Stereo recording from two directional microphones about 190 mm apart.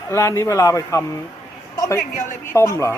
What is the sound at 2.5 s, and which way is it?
Speech, 15° left (ahead or behind).